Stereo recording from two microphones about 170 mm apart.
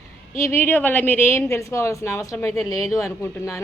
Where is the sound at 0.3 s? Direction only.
15° left (ahead or behind).